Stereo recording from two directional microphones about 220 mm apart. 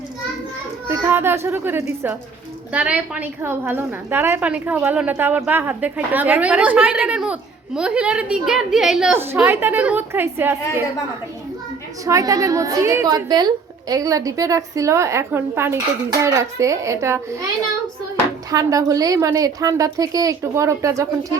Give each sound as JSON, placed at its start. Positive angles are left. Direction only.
{"t": 0.9, "sound": "a woman's voice", "side_deg": -10}
{"t": 12.0, "sound": "a woman's voice", "side_deg": -15}
{"t": 18.5, "sound": "a woman's voice", "side_deg": -15}